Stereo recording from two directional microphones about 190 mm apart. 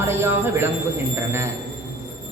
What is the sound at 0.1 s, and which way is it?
Speech, 10° right (ahead or behind).